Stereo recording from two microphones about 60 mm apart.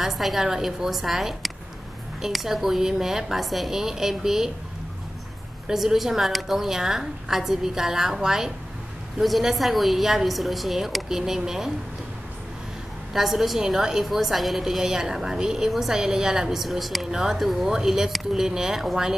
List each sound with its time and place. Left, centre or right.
0.0 s speech: centre
5.7 s a woman's voice: centre
13.1 s a woman's voice: centre